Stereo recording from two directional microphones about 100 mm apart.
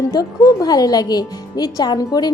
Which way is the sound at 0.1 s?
40° left (ahead or behind).